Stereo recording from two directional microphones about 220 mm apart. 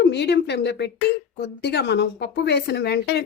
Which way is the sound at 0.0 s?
50° left (ahead or behind).